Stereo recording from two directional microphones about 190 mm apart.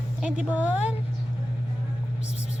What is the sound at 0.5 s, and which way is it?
Speech, 5° right (ahead or behind).